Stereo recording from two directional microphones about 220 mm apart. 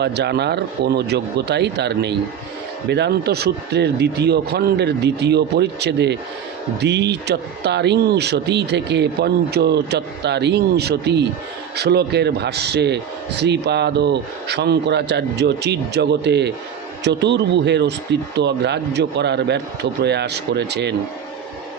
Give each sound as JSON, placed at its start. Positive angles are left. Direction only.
{"t": 0.0, "sound": "speech", "side_deg": -50}